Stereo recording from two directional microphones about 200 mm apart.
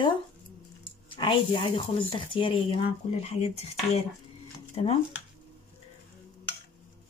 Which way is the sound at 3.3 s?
30° left (ahead or behind).